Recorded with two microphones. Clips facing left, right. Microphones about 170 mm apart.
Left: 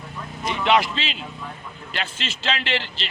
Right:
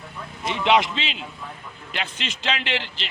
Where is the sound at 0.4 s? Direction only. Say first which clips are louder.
Even; 20° right (ahead or behind).